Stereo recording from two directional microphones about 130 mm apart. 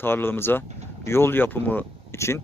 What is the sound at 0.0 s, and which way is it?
Speech, 15° left (ahead or behind).